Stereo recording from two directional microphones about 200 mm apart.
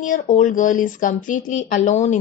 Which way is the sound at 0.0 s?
40° left (ahead or behind).